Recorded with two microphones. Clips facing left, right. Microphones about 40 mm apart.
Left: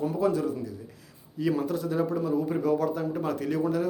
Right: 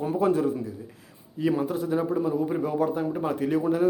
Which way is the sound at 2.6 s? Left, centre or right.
Right.